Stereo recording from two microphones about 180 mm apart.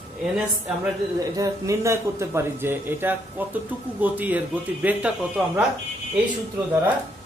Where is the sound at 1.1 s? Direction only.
20° right (ahead or behind).